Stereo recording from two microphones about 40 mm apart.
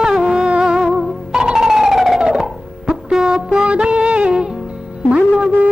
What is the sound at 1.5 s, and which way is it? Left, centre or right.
Police car, centre.